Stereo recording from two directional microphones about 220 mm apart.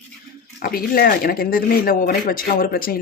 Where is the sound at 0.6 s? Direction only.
40° left (ahead or behind).